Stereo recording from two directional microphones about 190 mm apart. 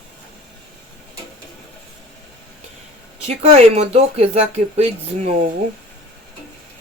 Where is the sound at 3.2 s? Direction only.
35° right (ahead or behind).